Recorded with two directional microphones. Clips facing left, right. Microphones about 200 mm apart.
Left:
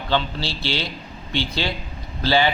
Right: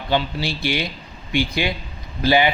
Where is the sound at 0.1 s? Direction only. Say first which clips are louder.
Right 2 dB; 15° right (ahead or behind).